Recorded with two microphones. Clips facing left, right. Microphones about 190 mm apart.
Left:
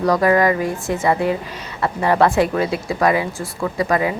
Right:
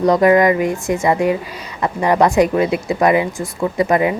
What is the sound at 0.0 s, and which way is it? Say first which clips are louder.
A woman's voice: right 4 dB; 20° right (ahead or behind).